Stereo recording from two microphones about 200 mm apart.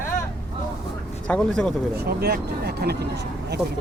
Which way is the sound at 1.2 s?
5° left (ahead or behind).